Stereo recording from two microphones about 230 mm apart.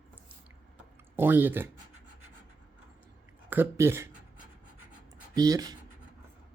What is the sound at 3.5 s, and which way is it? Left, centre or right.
Speech, centre.